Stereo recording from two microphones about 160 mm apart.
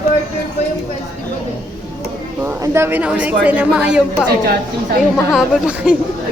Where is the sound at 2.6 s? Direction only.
15° right (ahead or behind).